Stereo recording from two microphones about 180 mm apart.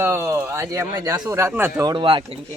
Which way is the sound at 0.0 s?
10° right (ahead or behind).